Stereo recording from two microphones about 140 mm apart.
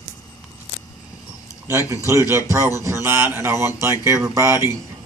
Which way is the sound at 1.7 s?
20° right (ahead or behind).